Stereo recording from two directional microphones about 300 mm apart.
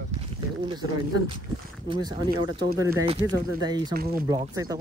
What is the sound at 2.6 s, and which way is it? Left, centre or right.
Speech, centre.